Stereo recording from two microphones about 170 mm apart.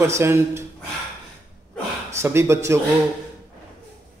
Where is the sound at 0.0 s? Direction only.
15° right (ahead or behind).